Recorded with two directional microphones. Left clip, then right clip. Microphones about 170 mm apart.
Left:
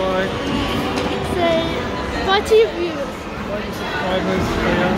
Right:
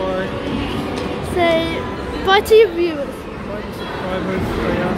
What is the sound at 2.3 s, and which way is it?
Speech, 45° right (ahead or behind).